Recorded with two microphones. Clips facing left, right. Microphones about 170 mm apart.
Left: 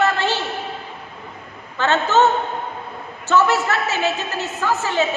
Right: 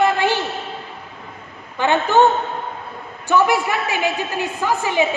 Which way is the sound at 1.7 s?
15° right (ahead or behind).